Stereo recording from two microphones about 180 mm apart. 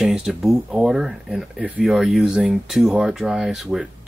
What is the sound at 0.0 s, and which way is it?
Speech, 5° right (ahead or behind).